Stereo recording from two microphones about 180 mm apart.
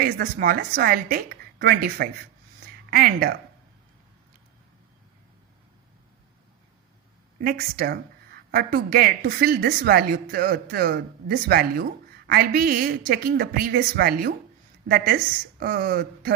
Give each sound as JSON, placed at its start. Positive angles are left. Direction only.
{"t": 0.0, "sound": "speech", "side_deg": -55}
{"t": 7.4, "sound": "speech", "side_deg": -55}